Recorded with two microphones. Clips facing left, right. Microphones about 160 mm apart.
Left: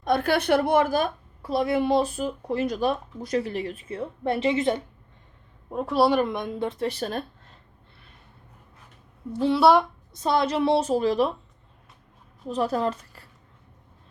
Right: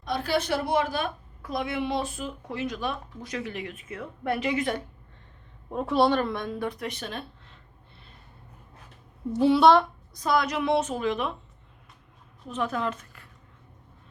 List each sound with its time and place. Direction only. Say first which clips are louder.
0.0 s a woman's voice: left 5 dB; 55° left (ahead or behind)
1.4 s speech: left 6 dB; 30° left (ahead or behind)
5.7 s a woman's voice: left 2 dB; centre (ahead or behind); by 7.6 s 40° left (ahead or behind)
9.5 s speech: even; 5° left (ahead or behind)
10.2 s speech: left 3 dB; 30° left (ahead or behind)
12.5 s speech: left 4 dB; 35° left (ahead or behind)